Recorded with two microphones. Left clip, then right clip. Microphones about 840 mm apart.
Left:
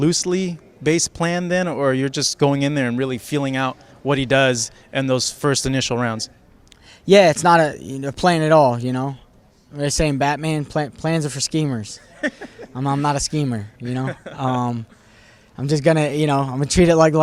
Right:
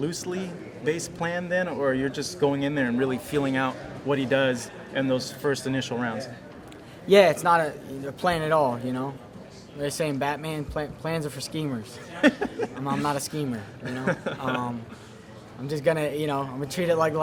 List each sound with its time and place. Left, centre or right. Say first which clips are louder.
0.0 s speech: left 11 dB; left